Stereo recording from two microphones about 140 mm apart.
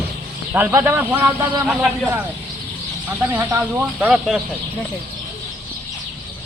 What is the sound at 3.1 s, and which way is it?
Speech, 15° right (ahead or behind).